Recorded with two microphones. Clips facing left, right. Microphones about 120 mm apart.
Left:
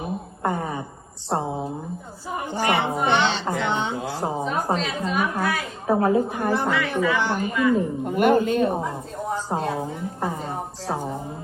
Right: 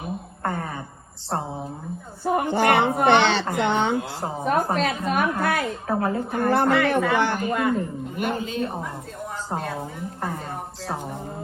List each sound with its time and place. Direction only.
0.4 s a sound: 15° left (ahead or behind)
1.4 s a woman's voice: 15° left (ahead or behind)
2.2 s a woman's voice: 55° right (ahead or behind)
4.2 s a woman's voice: 15° left (ahead or behind)
4.8 s a woman's voice: 55° right (ahead or behind)
5.9 s a woman's voice: 15° left (ahead or behind)
6.5 s a woman's voice: 55° right (ahead or behind)
8.0 s speech: 55° left (ahead or behind)
9.6 s a woman's voice: 25° left (ahead or behind)